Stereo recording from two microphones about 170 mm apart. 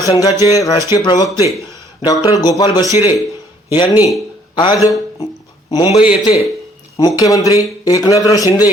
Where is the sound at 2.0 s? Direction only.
20° left (ahead or behind).